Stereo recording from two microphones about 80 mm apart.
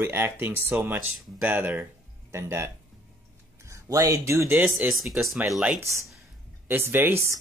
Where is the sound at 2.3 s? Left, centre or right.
Right.